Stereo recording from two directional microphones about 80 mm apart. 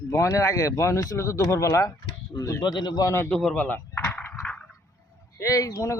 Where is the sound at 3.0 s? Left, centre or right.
Left.